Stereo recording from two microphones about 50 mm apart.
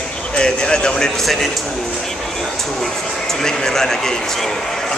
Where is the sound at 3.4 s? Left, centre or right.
Centre.